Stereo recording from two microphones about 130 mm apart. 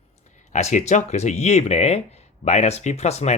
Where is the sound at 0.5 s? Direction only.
60° left (ahead or behind).